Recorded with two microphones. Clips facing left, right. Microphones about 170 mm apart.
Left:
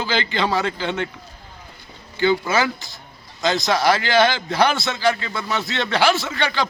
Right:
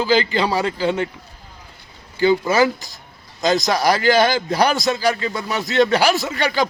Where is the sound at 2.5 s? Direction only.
40° right (ahead or behind).